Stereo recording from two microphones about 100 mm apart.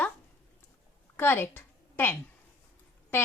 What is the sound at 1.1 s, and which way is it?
A woman's voice, 20° left (ahead or behind).